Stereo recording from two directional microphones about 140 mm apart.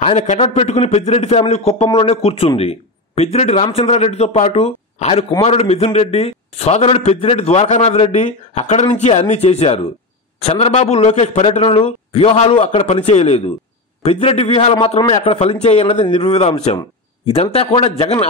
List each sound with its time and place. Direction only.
0.0 s a man's voice: 50° left (ahead or behind)